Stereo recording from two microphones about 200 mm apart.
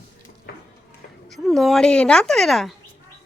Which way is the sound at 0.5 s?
50° left (ahead or behind).